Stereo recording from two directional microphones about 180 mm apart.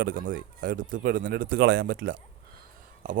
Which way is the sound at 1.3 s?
55° right (ahead or behind).